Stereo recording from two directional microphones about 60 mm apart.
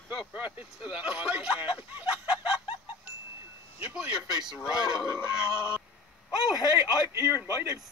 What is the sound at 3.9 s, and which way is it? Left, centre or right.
Speech, centre.